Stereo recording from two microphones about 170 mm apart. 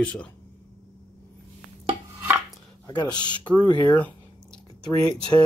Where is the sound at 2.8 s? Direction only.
25° left (ahead or behind).